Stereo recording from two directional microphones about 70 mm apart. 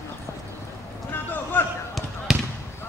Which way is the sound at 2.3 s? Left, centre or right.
Centre.